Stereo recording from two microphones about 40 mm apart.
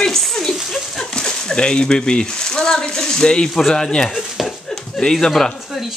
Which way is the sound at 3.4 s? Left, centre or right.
Centre.